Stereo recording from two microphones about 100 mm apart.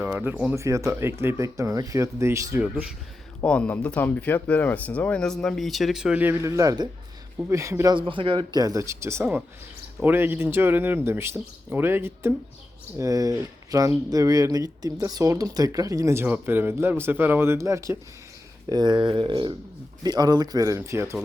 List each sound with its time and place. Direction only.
0.0 s speech: 20° right (ahead or behind)
0.5 s speech: 30° right (ahead or behind)
2.6 s speech: 15° right (ahead or behind)
3.4 s speech: 10° left (ahead or behind)
6.4 s speech: 30° right (ahead or behind)
7.9 s a man's voice: 60° right (ahead or behind)
8.5 s speech: 35° right (ahead or behind)
13.0 s speech: 35° right (ahead or behind)
18.7 s speech: 45° right (ahead or behind); by 21.2 s 30° right (ahead or behind)